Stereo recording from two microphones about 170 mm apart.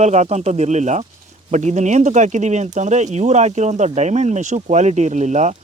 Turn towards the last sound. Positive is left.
turn(degrees=-45)  # may be behind; listen again after turning